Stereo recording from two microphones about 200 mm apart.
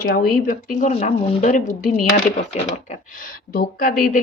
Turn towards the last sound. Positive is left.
turn(degrees=40)  # may be behind; listen again after turning